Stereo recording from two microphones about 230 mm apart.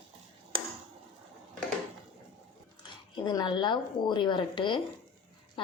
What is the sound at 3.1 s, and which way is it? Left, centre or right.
Speech, centre.